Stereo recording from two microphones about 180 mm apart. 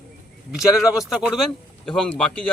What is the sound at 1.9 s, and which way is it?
Speech, 5° left (ahead or behind).